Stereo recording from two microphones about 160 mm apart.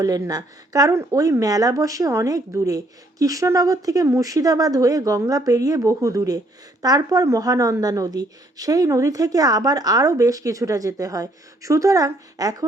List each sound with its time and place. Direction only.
0.0 s a woman's voice: 20° right (ahead or behind)